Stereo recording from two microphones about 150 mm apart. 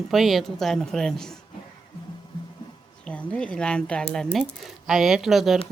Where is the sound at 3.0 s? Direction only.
10° left (ahead or behind).